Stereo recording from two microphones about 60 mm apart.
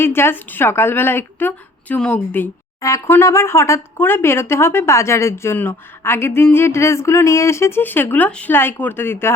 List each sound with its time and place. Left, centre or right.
0.0 s a woman's voice: left
2.0 s speech: centre
3.1 s a woman's voice: left
3.9 s a woman's voice: left
7.8 s a woman's voice: left